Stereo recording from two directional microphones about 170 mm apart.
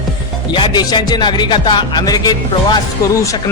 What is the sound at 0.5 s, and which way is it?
Speech, 25° left (ahead or behind).